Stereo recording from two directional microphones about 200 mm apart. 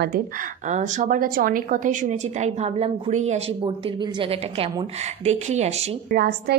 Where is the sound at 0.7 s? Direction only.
40° right (ahead or behind).